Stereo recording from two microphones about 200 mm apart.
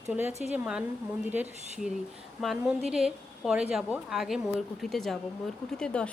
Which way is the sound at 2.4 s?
Centre (ahead or behind).